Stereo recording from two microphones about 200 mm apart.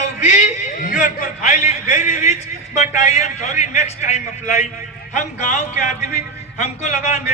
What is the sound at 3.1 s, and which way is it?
Speech, 35° left (ahead or behind).